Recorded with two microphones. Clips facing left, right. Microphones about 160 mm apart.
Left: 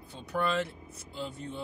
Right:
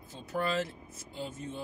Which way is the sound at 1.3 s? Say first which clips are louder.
Even; 70° left (ahead or behind).